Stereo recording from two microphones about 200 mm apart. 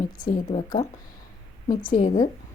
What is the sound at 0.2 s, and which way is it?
Speech, 40° left (ahead or behind).